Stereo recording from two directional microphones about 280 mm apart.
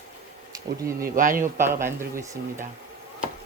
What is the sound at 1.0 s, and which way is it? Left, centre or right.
Speech, right.